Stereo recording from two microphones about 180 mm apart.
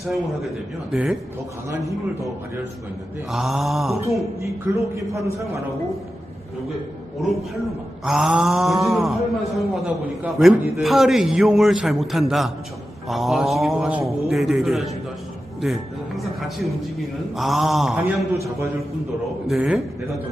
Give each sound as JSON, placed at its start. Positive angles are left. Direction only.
{"t": 3.3, "sound": "speech", "side_deg": 0}
{"t": 4.0, "sound": "a man's voice", "side_deg": -15}
{"t": 8.0, "sound": "speech", "side_deg": 0}
{"t": 15.6, "sound": "music", "side_deg": 0}
{"t": 16.3, "sound": "a man's voice", "side_deg": 0}
{"t": 18.3, "sound": "a man's voice", "side_deg": -15}
{"t": 19.4, "sound": "speech", "side_deg": -5}